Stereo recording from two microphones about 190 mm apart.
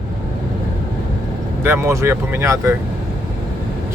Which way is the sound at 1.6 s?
15° right (ahead or behind).